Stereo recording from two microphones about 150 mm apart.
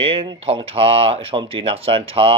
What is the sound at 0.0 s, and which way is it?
Speech, 40° right (ahead or behind).